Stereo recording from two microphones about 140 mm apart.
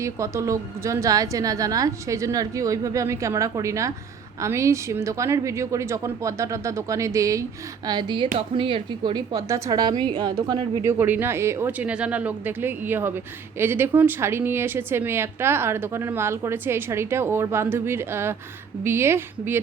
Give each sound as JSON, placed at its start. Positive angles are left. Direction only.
{"t": 0.0, "sound": "a woman's voice", "side_deg": -20}
{"t": 10.8, "sound": "speech", "side_deg": -15}